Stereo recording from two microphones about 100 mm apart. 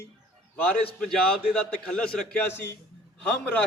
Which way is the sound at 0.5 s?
15° left (ahead or behind).